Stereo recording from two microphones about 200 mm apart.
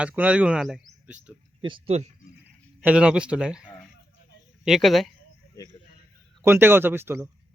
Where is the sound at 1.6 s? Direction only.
25° right (ahead or behind).